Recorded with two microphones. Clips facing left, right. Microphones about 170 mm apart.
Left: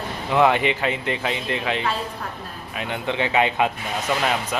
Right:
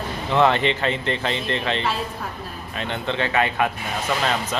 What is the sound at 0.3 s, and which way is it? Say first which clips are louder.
Speech: even; 10° left (ahead or behind).